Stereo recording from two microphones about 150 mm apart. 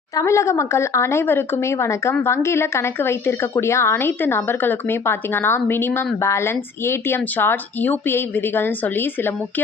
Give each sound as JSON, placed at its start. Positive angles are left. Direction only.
{"t": 0.2, "sound": "speech", "side_deg": 20}